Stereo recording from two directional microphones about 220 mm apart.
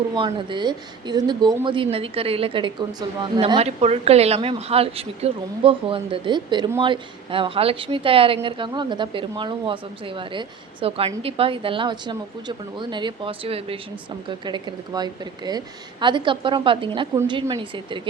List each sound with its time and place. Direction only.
0.1 s speech: 20° right (ahead or behind)